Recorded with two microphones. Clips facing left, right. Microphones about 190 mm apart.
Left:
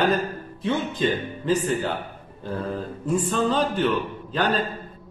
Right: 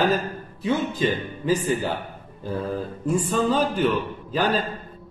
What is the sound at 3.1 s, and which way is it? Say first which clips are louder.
A man's voice: right 1 dB; 10° right (ahead or behind).